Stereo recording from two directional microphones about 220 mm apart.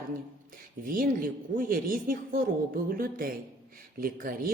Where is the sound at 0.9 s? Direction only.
40° right (ahead or behind).